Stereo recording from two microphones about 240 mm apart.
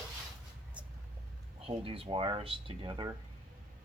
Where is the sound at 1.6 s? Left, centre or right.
Right.